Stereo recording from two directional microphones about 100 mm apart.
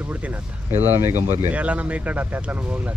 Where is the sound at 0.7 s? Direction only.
20° right (ahead or behind).